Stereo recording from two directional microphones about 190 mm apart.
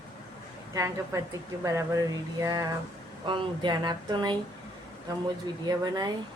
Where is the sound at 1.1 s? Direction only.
15° right (ahead or behind).